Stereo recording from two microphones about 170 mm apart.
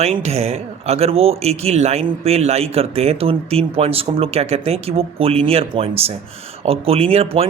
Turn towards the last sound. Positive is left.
turn(degrees=-35)  # may be behind; listen again after turning